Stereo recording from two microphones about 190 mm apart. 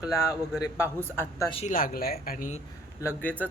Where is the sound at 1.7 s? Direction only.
50° left (ahead or behind).